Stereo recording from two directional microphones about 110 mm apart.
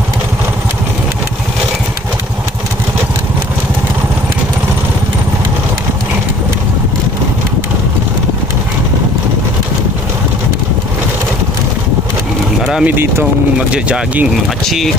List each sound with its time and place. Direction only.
12.8 s speech: 20° right (ahead or behind)